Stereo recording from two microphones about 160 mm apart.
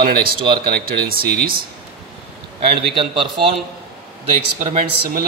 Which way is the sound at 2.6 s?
35° right (ahead or behind).